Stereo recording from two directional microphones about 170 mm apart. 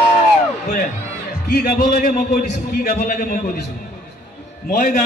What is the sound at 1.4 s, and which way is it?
A man's voice, 60° left (ahead or behind).